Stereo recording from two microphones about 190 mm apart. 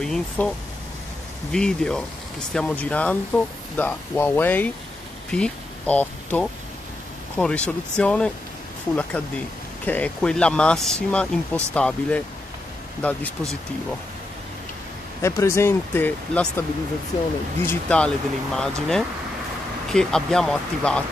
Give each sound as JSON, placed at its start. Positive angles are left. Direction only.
{"t": 0.0, "sound": "speech", "side_deg": 5}
{"t": 1.5, "sound": "speech", "side_deg": 5}
{"t": 15.2, "sound": "speech", "side_deg": 15}
{"t": 17.6, "sound": "speech", "side_deg": 5}